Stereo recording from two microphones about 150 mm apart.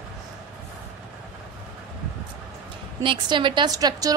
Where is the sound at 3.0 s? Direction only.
35° right (ahead or behind).